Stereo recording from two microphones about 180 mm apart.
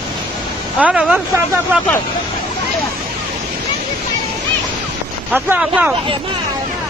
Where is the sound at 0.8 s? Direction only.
5° right (ahead or behind).